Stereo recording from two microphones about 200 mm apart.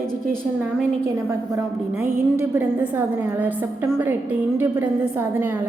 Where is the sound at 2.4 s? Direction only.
10° right (ahead or behind).